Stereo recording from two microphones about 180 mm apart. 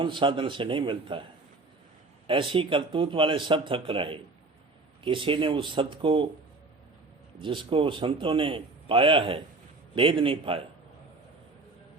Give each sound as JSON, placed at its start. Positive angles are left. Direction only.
{"t": 0.0, "sound": "a man's voice", "side_deg": -25}
{"t": 2.2, "sound": "a man's voice", "side_deg": -30}
{"t": 7.3, "sound": "a man's voice", "side_deg": -30}